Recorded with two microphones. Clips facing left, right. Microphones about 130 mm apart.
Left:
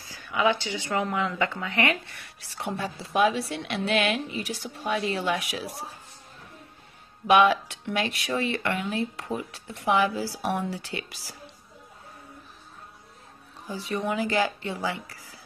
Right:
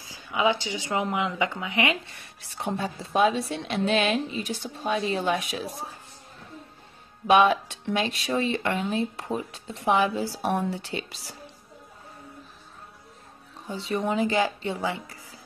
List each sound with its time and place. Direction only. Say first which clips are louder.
0.0 s speech: even; 20° right (ahead or behind)
7.2 s speech: even; 30° right (ahead or behind)
13.8 s speech: right 2 dB; 25° right (ahead or behind)